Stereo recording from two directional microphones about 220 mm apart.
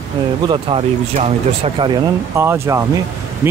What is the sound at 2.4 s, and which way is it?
Speech, 10° right (ahead or behind).